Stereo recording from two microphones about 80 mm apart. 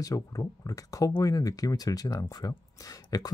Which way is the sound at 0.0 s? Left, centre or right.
Left.